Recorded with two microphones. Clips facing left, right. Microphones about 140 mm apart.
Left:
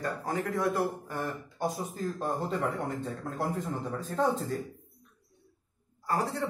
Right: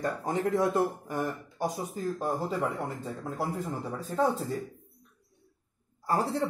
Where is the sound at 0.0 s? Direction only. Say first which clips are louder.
Right 3 dB; 20° right (ahead or behind); by 3.7 s 5° right (ahead or behind).